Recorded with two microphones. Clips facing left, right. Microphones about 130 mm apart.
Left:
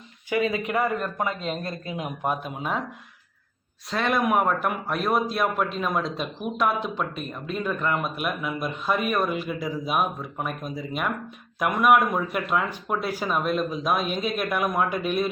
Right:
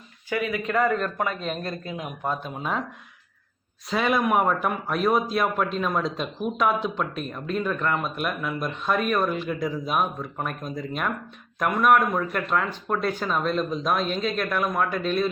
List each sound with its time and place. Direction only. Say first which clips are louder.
0.3 s a man's voice: left 2 dB; 25° left (ahead or behind)
2.4 s speech: even; 5° left (ahead or behind)
3.8 s speech: right 1 dB; centre (ahead or behind); by 15.3 s 15° left (ahead or behind)